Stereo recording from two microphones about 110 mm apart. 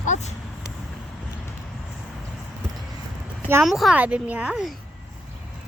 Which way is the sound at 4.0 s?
15° right (ahead or behind).